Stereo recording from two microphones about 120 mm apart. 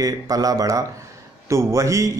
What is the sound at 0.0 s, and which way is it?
A man's voice, 30° right (ahead or behind).